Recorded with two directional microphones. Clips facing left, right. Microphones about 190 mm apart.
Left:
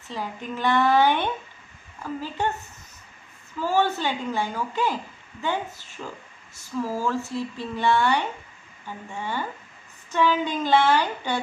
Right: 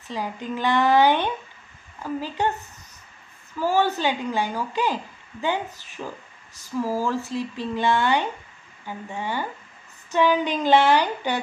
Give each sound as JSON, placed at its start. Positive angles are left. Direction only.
{"t": 0.1, "sound": "a woman's voice", "side_deg": -15}
{"t": 3.5, "sound": "a woman's voice", "side_deg": -15}
{"t": 9.2, "sound": "a woman's voice", "side_deg": -15}